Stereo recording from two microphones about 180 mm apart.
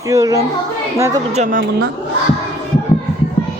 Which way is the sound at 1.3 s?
40° right (ahead or behind).